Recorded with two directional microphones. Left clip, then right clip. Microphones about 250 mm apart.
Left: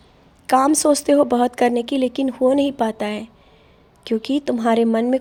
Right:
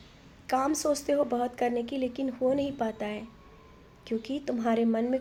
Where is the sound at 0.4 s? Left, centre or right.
Left.